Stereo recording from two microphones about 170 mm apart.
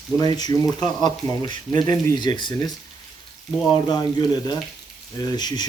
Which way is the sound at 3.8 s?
25° left (ahead or behind).